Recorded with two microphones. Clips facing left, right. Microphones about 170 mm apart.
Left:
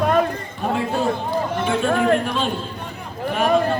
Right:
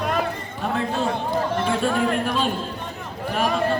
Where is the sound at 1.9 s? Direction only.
50° left (ahead or behind).